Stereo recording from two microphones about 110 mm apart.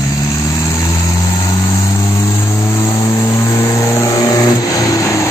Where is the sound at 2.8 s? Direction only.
30° left (ahead or behind).